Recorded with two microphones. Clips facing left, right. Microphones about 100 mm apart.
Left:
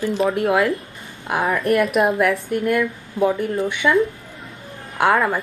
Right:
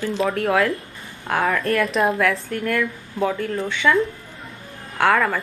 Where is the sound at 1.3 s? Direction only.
20° left (ahead or behind).